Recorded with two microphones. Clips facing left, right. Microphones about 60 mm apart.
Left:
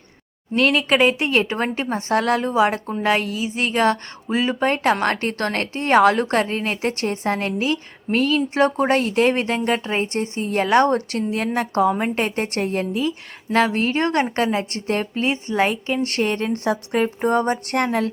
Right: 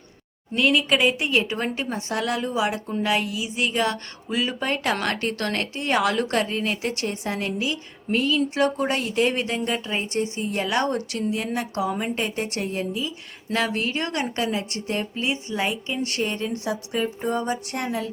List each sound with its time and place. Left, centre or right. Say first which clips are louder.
0.5 s a woman's voice: left 3 dB; left